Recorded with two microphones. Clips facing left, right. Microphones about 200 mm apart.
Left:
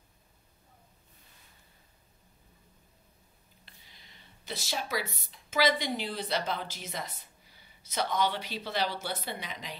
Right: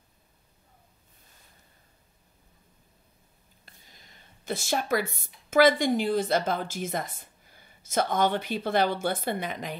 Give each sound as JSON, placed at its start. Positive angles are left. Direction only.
{"t": 3.6, "sound": "speech", "side_deg": -45}